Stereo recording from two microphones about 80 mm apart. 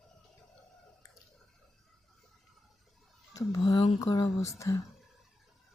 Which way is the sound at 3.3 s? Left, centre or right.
Left.